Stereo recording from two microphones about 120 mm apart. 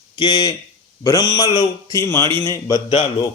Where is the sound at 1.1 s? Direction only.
30° left (ahead or behind).